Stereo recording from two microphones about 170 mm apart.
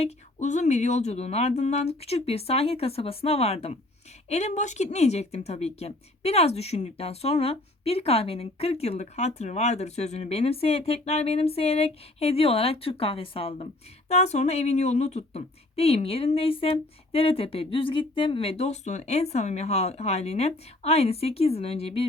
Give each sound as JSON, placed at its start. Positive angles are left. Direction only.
{"t": 0.0, "sound": "speech", "side_deg": 45}